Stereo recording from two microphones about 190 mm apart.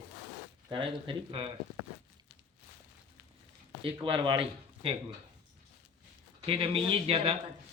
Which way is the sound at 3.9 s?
25° right (ahead or behind).